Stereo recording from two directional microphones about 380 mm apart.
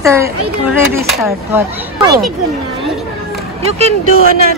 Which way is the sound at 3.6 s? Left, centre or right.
Centre.